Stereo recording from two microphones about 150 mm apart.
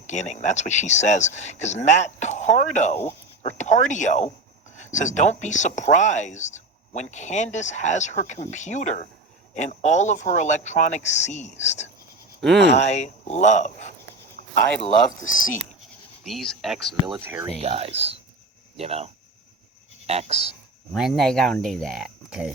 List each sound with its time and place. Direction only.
0.1 s speech: 50° left (ahead or behind)
13.2 s speech: 50° left (ahead or behind)
16.2 s speech: centre (ahead or behind)
17.2 s speech: 15° right (ahead or behind)
17.6 s speech: 45° right (ahead or behind)
20.9 s speech: centre (ahead or behind)